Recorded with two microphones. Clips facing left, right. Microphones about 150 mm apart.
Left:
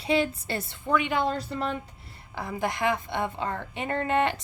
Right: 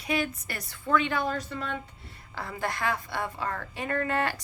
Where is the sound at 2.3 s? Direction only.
15° left (ahead or behind).